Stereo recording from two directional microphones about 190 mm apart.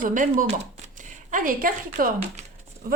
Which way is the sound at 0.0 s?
45° right (ahead or behind).